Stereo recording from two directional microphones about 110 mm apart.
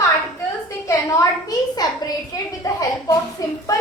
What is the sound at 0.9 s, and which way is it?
A woman's voice, 30° left (ahead or behind).